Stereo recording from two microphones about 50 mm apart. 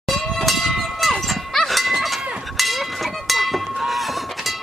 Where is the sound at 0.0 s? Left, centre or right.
Centre.